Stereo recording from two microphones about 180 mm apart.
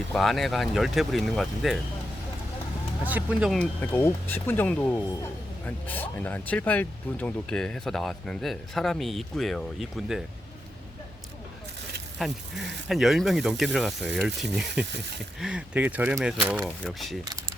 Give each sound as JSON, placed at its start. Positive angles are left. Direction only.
{"t": 0.1, "sound": "speech", "side_deg": 0}
{"t": 3.1, "sound": "speech", "side_deg": -10}
{"t": 3.6, "sound": "speech", "side_deg": 10}
{"t": 12.2, "sound": "speech", "side_deg": 0}
{"t": 14.8, "sound": "speech", "side_deg": -70}
{"t": 15.4, "sound": "speech", "side_deg": -5}